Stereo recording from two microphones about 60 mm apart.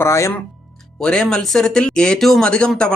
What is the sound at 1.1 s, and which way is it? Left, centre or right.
Speech, centre.